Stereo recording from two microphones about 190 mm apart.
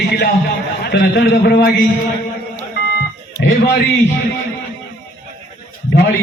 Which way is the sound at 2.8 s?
65° left (ahead or behind).